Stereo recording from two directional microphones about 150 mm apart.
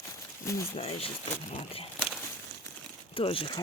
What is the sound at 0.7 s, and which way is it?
Speech, 40° left (ahead or behind).